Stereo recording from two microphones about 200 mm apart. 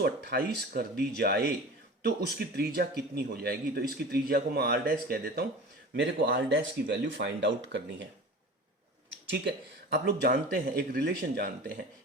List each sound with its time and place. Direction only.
0.0 s speech: 55° right (ahead or behind)
9.9 s speech: 55° right (ahead or behind)